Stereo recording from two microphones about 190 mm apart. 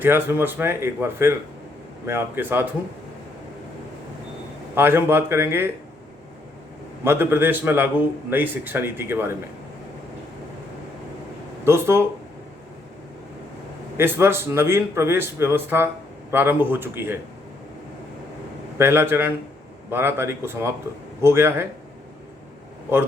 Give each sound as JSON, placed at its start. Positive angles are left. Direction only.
{"t": 0.0, "sound": "a man's voice", "side_deg": -10}
{"t": 4.7, "sound": "a man's voice", "side_deg": -10}
{"t": 7.0, "sound": "a man's voice", "side_deg": -10}
{"t": 11.6, "sound": "a man's voice", "side_deg": -15}
{"t": 13.9, "sound": "a man's voice", "side_deg": -10}
{"t": 18.8, "sound": "a man's voice", "side_deg": -10}